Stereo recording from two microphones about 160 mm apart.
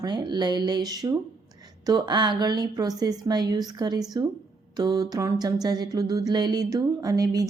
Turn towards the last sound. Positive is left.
turn(degrees=-20)  # may be behind; listen again after turning